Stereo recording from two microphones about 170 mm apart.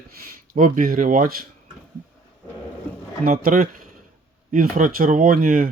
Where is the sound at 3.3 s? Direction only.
50° right (ahead or behind).